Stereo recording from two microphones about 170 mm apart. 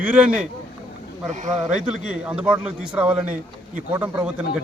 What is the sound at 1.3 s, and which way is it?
Speech, 45° right (ahead or behind).